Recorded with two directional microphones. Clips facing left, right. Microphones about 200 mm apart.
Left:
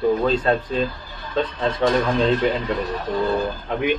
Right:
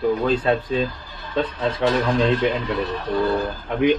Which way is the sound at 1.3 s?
5° right (ahead or behind).